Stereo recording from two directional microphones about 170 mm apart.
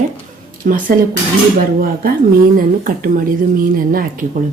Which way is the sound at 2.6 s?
50° right (ahead or behind).